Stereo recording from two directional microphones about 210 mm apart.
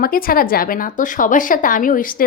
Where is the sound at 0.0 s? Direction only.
45° left (ahead or behind).